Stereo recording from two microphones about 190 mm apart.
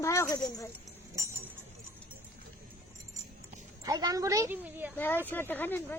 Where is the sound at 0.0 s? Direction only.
15° left (ahead or behind).